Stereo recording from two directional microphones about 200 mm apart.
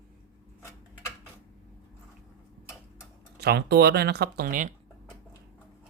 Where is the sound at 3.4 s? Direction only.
55° right (ahead or behind).